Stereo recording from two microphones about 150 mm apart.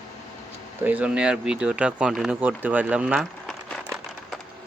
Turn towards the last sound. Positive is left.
turn(degrees=0)  # may be behind; listen again after turning